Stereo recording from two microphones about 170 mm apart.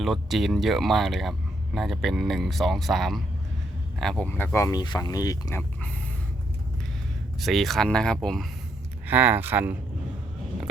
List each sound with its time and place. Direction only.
0.0 s speech: centre (ahead or behind); by 5.9 s 15° left (ahead or behind)
7.3 s speech: centre (ahead or behind)
9.0 s speech: 10° right (ahead or behind)